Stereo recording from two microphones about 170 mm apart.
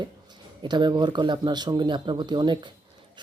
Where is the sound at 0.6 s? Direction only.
25° right (ahead or behind).